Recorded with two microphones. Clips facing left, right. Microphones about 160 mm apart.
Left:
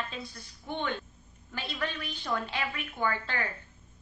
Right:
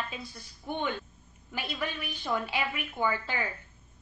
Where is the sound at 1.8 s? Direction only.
15° right (ahead or behind).